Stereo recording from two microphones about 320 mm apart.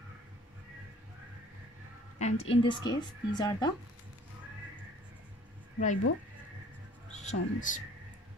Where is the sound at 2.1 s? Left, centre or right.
Left.